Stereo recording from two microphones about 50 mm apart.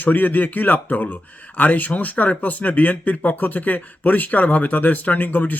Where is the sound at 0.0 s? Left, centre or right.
Left.